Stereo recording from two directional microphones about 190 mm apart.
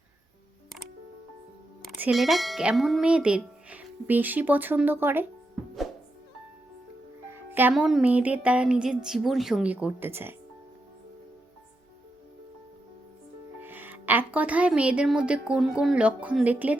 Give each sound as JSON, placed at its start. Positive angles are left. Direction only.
{"t": 1.8, "sound": "speech", "side_deg": -5}
{"t": 7.3, "sound": "music", "side_deg": -10}
{"t": 13.6, "sound": "speech", "side_deg": -10}